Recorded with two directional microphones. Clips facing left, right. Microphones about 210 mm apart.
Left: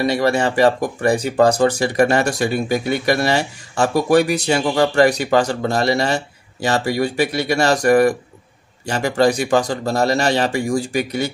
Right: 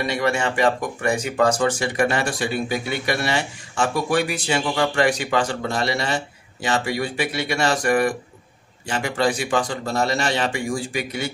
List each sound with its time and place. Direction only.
0.0 s speech: 35° left (ahead or behind)